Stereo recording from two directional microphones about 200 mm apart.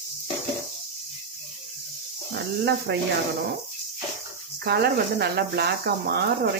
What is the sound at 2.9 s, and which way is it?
Speech, 55° right (ahead or behind).